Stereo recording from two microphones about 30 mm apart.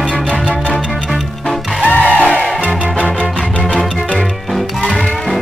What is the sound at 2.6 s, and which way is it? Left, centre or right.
Music, left.